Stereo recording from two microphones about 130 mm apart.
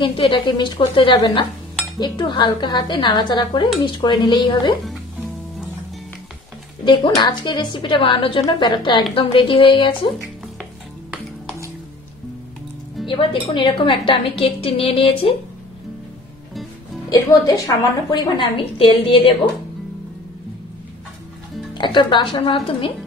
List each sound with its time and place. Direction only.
0.0 s a woman's voice: 40° left (ahead or behind)
6.8 s a woman's voice: 35° left (ahead or behind)
10.2 s music: 5° right (ahead or behind)
13.0 s a woman's voice: 40° left (ahead or behind)
17.1 s a woman's voice: 30° left (ahead or behind)
21.7 s a woman's voice: 35° left (ahead or behind)